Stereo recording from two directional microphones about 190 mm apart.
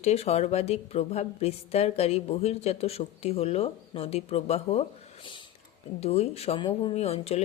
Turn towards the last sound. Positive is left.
turn(degrees=35)  # may be behind; listen again after turning